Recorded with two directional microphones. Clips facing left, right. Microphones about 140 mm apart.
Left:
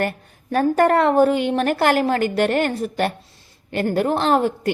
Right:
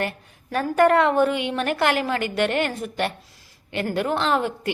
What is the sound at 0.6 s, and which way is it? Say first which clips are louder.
A woman's voice: left 1 dB; 35° left (ahead or behind).